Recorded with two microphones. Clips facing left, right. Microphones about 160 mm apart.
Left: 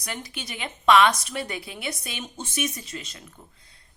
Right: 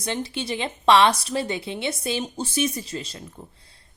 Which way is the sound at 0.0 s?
25° right (ahead or behind).